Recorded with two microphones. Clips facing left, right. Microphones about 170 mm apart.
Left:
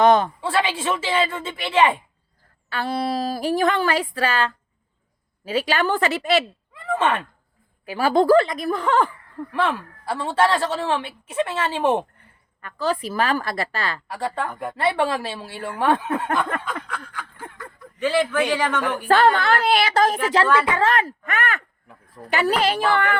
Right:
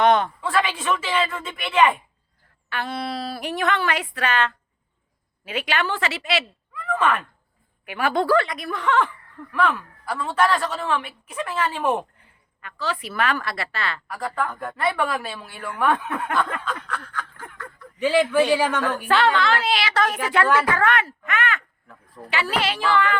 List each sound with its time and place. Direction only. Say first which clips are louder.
0.1 s a woman's voice: left 2 dB; 30° left (ahead or behind)
6.4 s a sound: left 1 dB; 25° left (ahead or behind)
7.9 s a woman's voice: left 5 dB; 30° left (ahead or behind)
12.2 s a woman's voice: left 2 dB; 40° left (ahead or behind); by 16.5 s 25° left (ahead or behind)
16.8 s a sound: right 1 dB; 10° left (ahead or behind)
18.0 s a man's voice: right 2 dB; 15° right (ahead or behind)
19.0 s a child's voice: left 4 dB; 45° left (ahead or behind)
19.9 s speech: left 4 dB; 30° left (ahead or behind)
22.8 s child singing: left 1 dB; 55° left (ahead or behind)